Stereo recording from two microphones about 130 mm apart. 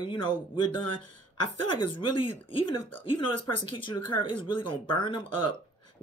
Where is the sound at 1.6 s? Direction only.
40° left (ahead or behind).